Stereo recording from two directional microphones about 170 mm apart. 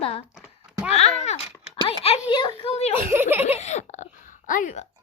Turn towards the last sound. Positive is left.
turn(degrees=50)  # may be behind; listen again after turning